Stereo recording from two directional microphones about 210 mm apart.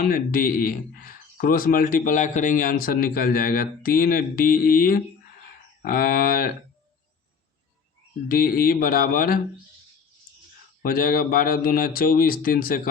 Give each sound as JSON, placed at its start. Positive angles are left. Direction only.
{"t": 0.0, "sound": "speech", "side_deg": 45}
{"t": 8.3, "sound": "speech", "side_deg": 45}
{"t": 10.8, "sound": "speech", "side_deg": 45}